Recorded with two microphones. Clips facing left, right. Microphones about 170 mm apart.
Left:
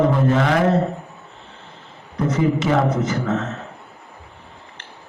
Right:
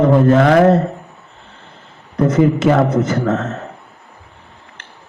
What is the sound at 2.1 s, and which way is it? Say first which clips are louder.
A man's voice: right 6 dB; 55° right (ahead or behind).